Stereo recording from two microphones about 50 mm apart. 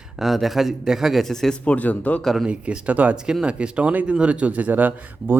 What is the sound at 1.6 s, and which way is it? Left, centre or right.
Speech, left.